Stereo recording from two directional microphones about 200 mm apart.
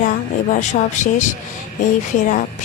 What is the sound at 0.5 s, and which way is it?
Speech, 40° left (ahead or behind).